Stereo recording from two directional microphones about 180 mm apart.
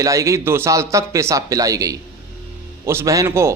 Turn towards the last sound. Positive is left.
turn(degrees=-15)  # may be behind; listen again after turning